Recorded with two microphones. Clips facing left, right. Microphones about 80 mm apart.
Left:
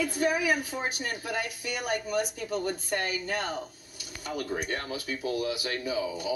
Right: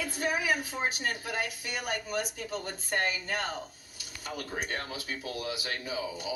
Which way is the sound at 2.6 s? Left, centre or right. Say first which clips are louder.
Left 1 dB; right.